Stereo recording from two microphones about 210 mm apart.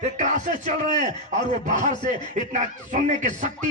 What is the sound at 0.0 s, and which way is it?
A man's voice, 35° right (ahead or behind).